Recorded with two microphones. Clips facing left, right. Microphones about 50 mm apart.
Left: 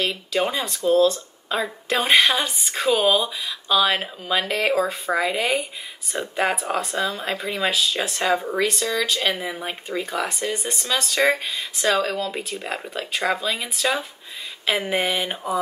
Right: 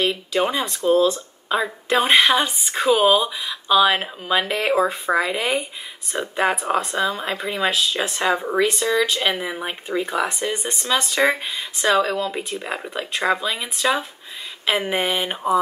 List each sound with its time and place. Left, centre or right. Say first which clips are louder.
0.0 s speech: right 2 dB; centre
1.0 s speech: even; centre